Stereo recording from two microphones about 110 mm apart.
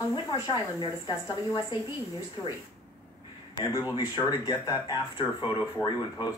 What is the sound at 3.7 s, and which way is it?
A woman's voice, 35° left (ahead or behind).